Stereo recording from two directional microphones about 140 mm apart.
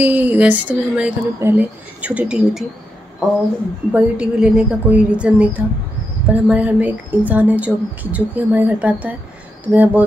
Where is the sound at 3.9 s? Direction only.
10° right (ahead or behind).